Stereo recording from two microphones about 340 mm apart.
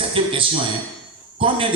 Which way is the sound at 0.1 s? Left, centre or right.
Centre.